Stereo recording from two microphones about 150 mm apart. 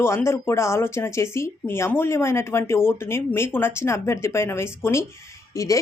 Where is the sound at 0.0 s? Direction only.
15° left (ahead or behind).